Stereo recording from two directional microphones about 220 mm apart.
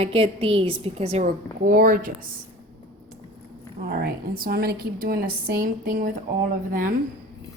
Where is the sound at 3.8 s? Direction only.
40° right (ahead or behind).